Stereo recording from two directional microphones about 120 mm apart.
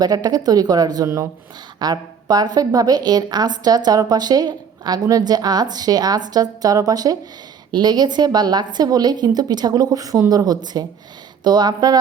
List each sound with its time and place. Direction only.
0.0 s a woman's voice: 35° right (ahead or behind)